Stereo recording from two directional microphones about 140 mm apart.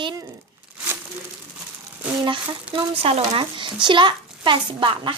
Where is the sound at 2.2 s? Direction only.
35° right (ahead or behind).